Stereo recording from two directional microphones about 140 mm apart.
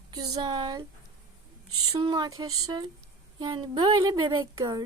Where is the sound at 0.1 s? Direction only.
25° right (ahead or behind).